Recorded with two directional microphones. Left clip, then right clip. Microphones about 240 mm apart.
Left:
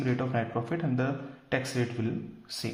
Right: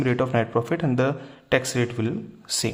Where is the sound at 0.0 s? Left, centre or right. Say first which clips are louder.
Right 8 dB; right.